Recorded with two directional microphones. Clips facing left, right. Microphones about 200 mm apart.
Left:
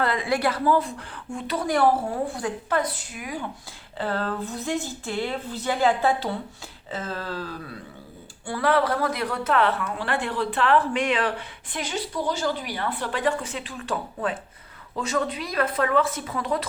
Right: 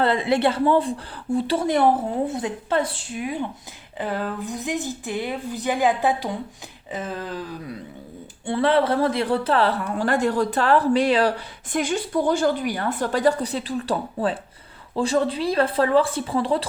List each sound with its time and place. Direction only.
0.0 s a woman's voice: 25° right (ahead or behind)
3.9 s speech: 15° right (ahead or behind); by 16.6 s 30° right (ahead or behind)